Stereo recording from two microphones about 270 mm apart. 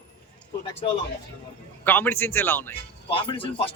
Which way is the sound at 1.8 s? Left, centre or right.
Centre.